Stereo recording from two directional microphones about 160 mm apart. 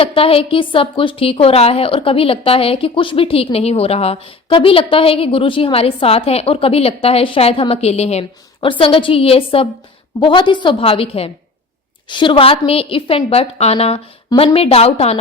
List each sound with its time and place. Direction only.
0.0 s a woman's voice: 35° left (ahead or behind)